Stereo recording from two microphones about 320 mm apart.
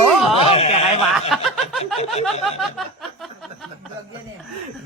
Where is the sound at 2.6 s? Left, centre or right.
Centre.